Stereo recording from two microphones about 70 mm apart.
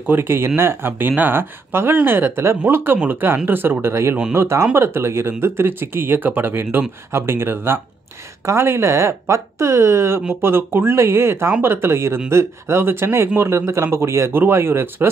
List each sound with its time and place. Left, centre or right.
0.1 s speech: right